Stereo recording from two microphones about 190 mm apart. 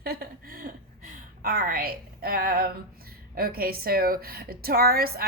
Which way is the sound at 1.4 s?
50° right (ahead or behind).